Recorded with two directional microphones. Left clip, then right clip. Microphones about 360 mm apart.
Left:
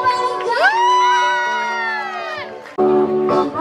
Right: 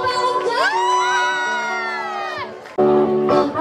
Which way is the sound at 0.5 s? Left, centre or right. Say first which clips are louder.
Left 4 dB; centre.